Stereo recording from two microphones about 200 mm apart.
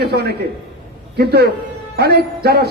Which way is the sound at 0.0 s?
55° right (ahead or behind).